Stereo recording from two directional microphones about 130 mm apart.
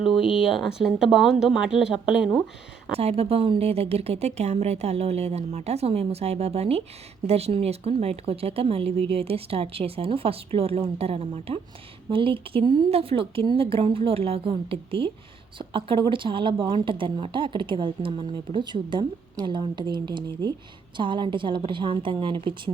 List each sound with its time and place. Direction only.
0.2 s speech: 45° left (ahead or behind)
0.5 s speech: centre (ahead or behind)
2.9 s a woman's voice: 50° right (ahead or behind)